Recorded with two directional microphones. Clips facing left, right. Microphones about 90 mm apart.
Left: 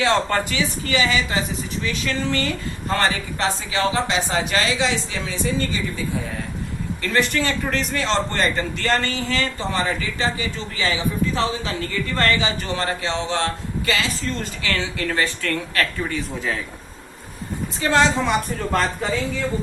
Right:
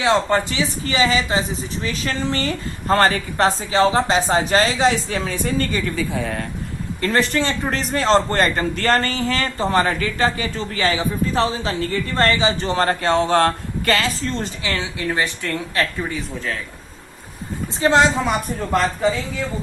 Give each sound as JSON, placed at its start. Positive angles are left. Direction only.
{"t": 0.0, "sound": "speech", "side_deg": -20}
{"t": 0.6, "sound": "a man's voice", "side_deg": -35}
{"t": 6.0, "sound": "speech", "side_deg": -80}
{"t": 7.0, "sound": "a man's voice", "side_deg": -35}
{"t": 14.2, "sound": "speech", "side_deg": -25}
{"t": 17.7, "sound": "speech", "side_deg": -25}